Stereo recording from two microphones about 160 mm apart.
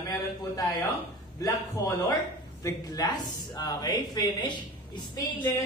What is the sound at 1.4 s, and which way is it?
Speech, 20° left (ahead or behind).